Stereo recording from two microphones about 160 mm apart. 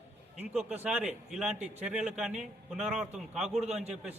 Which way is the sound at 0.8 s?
5° right (ahead or behind).